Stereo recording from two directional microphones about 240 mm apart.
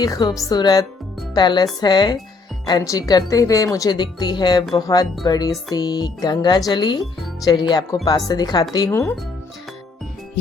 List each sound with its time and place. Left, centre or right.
0.0 s a woman's voice: centre